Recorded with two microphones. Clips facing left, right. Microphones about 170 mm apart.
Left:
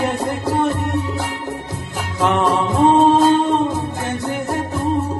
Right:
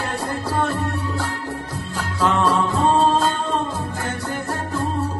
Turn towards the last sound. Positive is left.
turn(degrees=20)  # may be behind; listen again after turning